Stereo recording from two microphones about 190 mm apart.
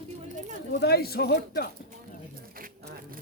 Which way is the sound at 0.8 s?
55° left (ahead or behind).